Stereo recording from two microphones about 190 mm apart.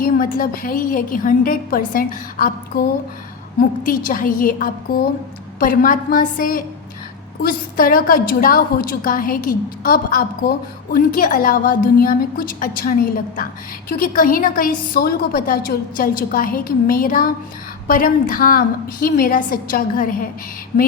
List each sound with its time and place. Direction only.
0.0 s a woman's voice: 45° left (ahead or behind)